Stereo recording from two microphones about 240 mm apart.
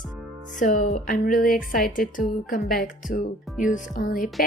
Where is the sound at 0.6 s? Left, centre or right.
Left.